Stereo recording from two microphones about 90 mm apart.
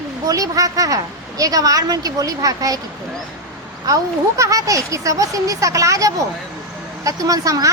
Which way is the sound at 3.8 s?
40° right (ahead or behind).